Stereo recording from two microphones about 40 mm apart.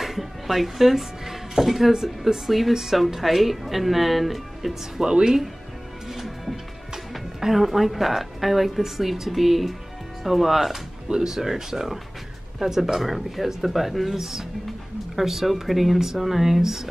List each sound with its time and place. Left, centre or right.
0.0 s speech: centre
5.0 s speech: right
6.0 s music: centre
7.3 s speech: centre